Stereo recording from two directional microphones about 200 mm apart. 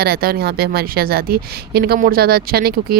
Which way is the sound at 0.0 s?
50° right (ahead or behind).